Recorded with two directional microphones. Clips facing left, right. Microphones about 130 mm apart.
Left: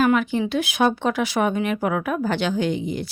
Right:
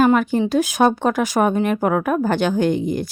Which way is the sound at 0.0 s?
45° right (ahead or behind).